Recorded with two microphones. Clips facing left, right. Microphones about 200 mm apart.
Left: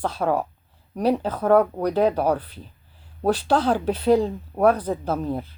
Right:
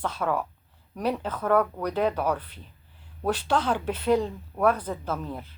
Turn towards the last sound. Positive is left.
turn(degrees=40)  # may be behind; listen again after turning